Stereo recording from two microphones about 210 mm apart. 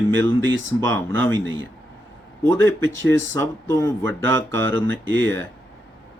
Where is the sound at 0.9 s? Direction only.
10° left (ahead or behind).